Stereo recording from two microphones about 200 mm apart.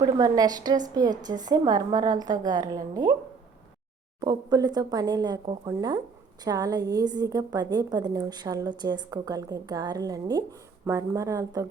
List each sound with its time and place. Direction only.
0.0 s a woman's voice: 20° right (ahead or behind)
4.2 s a woman's voice: 20° right (ahead or behind)